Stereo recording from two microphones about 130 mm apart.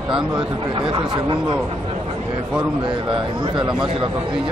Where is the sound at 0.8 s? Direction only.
40° right (ahead or behind).